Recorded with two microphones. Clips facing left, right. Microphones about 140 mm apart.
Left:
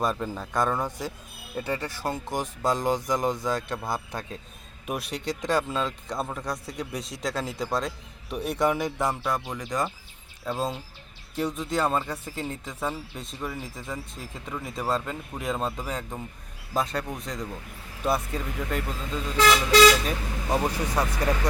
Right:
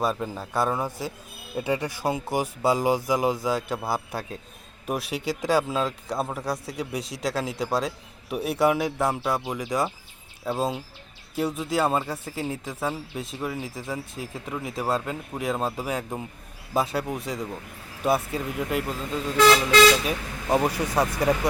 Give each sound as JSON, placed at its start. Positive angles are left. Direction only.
{"t": 0.0, "sound": "speech", "side_deg": -5}